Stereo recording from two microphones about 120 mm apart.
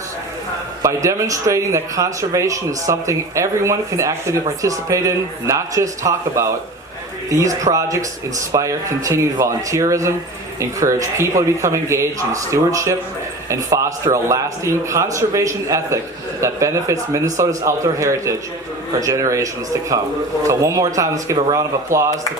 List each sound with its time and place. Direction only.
0.8 s speech: 25° right (ahead or behind)